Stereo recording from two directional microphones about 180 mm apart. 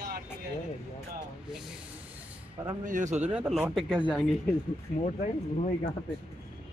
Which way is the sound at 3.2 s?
5° right (ahead or behind).